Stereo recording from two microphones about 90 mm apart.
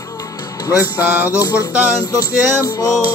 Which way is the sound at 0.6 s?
40° left (ahead or behind).